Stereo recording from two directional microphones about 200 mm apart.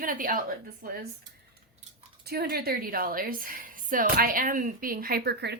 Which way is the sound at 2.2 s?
50° right (ahead or behind).